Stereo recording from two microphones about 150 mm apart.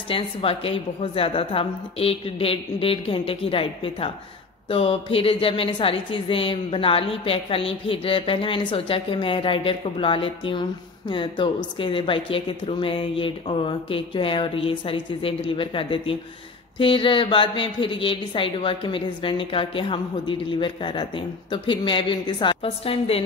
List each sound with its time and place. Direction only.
0.1 s speech: 40° left (ahead or behind)